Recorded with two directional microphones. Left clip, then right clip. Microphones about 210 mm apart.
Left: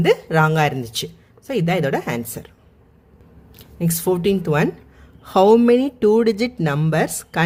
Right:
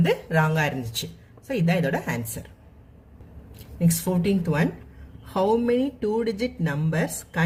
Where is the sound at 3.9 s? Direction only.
55° left (ahead or behind).